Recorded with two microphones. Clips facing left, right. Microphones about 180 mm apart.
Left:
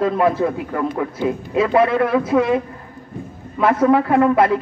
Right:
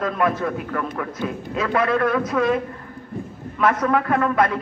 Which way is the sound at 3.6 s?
25° left (ahead or behind).